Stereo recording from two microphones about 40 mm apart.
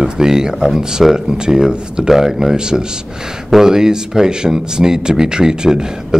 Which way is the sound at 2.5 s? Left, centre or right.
Centre.